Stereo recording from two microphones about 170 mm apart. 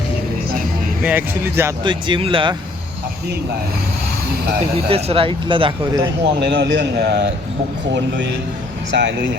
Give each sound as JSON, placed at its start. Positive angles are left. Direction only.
{"t": 1.0, "sound": "speech", "side_deg": -10}
{"t": 1.8, "sound": "speech", "side_deg": -30}
{"t": 4.7, "sound": "speech", "side_deg": -35}
{"t": 6.4, "sound": "a man's voice", "side_deg": -85}
{"t": 7.9, "sound": "speech", "side_deg": -90}